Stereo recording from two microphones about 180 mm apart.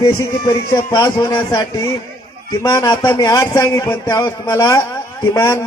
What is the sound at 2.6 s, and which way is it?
A man's voice, 20° left (ahead or behind).